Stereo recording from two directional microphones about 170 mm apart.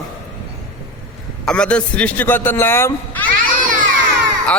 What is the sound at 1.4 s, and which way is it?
Speech, 5° left (ahead or behind).